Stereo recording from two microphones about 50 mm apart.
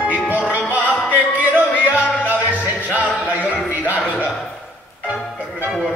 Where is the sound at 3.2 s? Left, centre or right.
Left.